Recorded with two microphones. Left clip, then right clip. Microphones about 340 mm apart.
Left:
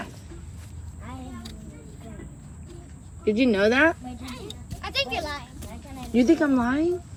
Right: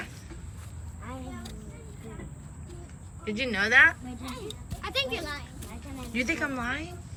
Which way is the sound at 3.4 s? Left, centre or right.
Centre.